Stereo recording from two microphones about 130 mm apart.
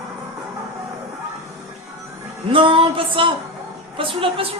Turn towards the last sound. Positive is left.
turn(degrees=-45)  # may be behind; listen again after turning